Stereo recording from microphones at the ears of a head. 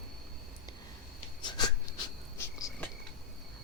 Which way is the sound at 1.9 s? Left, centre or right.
Left.